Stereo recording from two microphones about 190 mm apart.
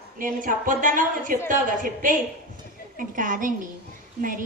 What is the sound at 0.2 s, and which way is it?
A woman's voice, 45° right (ahead or behind).